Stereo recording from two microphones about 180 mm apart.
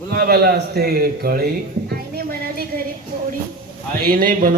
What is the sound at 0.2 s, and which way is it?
A man's voice, 60° right (ahead or behind).